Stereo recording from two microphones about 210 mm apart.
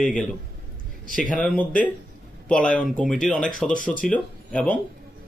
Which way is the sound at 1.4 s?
5° left (ahead or behind).